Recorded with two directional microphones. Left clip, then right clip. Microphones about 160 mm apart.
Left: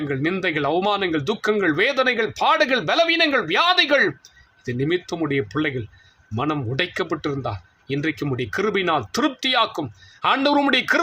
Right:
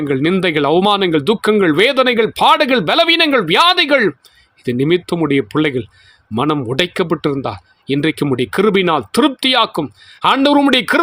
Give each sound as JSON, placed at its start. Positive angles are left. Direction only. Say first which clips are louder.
{"t": 0.1, "sound": "speech", "louder": "right 8 dB", "side_deg": -60}